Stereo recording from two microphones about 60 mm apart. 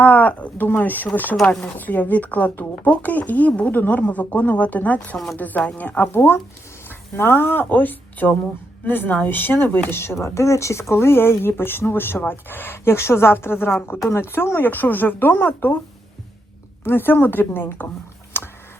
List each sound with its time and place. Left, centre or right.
0.0 s speech: left
5.1 s speech: centre
5.4 s speech: left
6.1 s speech: left
16.8 s speech: left